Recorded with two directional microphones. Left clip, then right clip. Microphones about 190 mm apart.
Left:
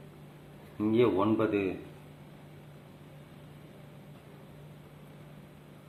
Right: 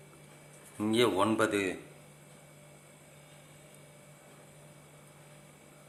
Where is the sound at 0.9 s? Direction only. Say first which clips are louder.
Left 1 dB; 20° right (ahead or behind).